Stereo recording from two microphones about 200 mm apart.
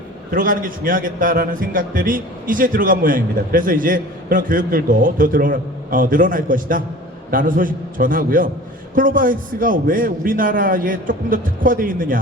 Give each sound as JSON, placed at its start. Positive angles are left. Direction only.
{"t": 0.3, "sound": "a man's voice", "side_deg": -45}